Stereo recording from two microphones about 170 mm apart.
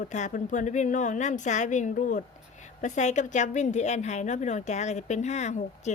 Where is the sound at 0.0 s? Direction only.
50° left (ahead or behind).